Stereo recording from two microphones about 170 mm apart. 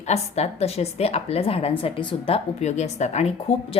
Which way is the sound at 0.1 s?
40° left (ahead or behind).